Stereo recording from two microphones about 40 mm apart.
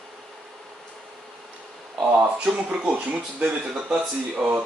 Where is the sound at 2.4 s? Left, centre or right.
Right.